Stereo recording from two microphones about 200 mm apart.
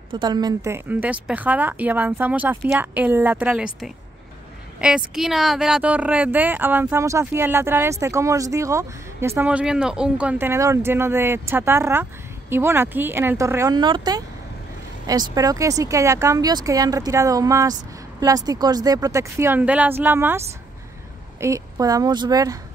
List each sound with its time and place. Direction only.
0.1 s speech: 20° right (ahead or behind)